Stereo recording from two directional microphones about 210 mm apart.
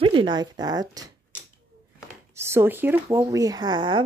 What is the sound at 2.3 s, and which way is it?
Speech, 10° right (ahead or behind).